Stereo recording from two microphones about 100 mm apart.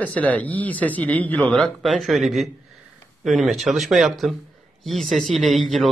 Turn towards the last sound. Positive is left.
turn(degrees=0)  # may be behind; listen again after turning